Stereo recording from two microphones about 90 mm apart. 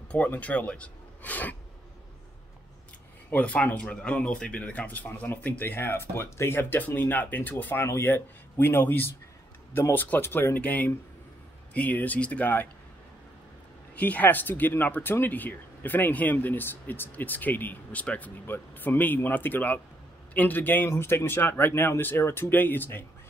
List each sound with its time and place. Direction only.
0.1 s speech: 15° left (ahead or behind)
3.3 s speech: 15° left (ahead or behind)
13.9 s speech: 20° left (ahead or behind)